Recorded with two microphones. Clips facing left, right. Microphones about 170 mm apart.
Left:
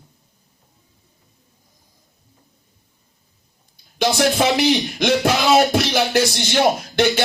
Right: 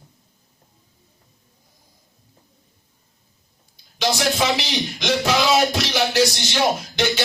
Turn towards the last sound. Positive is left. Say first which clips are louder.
# left 4 dB
turn(degrees=55)  # may be behind; listen again after turning